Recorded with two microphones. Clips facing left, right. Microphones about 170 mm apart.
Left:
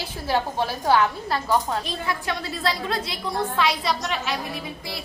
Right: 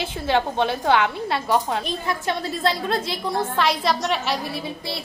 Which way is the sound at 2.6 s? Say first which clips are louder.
Right 3 dB; 50° right (ahead or behind).